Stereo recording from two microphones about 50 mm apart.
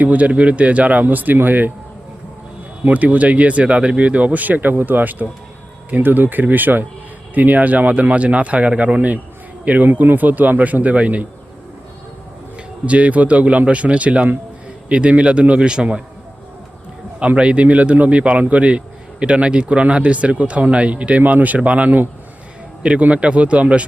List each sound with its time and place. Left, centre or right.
0.0 s speech: right
2.8 s speech: right
12.8 s speech: right
17.2 s speech: right